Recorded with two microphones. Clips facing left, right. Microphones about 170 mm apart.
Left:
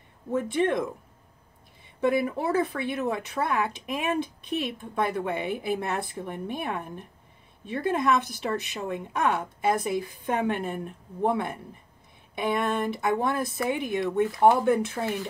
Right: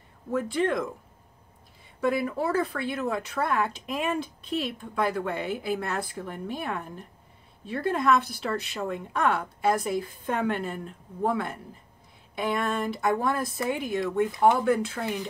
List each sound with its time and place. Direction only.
0.3 s speech: 20° left (ahead or behind)
2.0 s speech: 20° left (ahead or behind)